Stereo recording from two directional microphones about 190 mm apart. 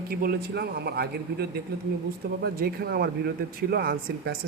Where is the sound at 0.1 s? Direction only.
55° right (ahead or behind).